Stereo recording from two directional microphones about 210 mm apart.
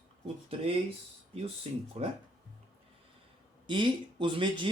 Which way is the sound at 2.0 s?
30° right (ahead or behind).